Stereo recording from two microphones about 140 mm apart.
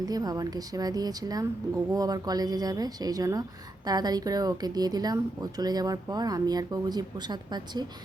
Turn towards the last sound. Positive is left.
turn(degrees=-30)  # may be behind; listen again after turning